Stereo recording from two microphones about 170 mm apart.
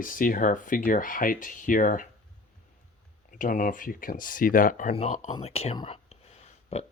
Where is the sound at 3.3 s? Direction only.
50° left (ahead or behind).